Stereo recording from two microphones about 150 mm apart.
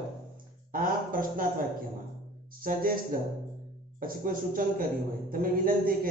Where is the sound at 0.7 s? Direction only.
70° right (ahead or behind).